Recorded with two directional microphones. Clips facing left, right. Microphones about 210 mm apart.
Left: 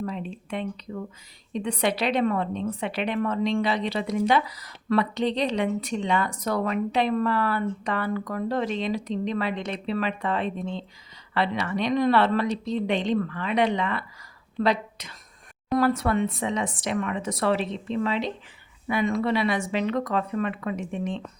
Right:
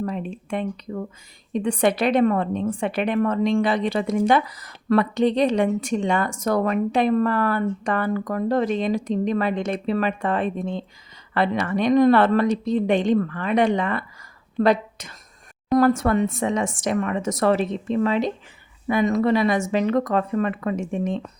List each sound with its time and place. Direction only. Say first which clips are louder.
0.0 s a woman's voice: right 4 dB; 50° right (ahead or behind)